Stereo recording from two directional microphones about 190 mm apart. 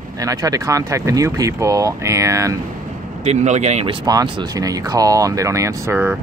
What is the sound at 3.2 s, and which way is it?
Speech, 35° right (ahead or behind).